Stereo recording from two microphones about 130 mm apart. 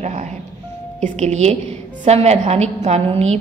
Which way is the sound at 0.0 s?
65° right (ahead or behind).